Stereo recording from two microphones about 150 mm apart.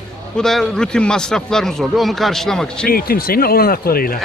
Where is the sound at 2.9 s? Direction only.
85° left.